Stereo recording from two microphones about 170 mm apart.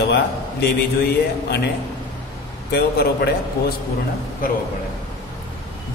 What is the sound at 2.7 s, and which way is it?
Speech, 70° left (ahead or behind).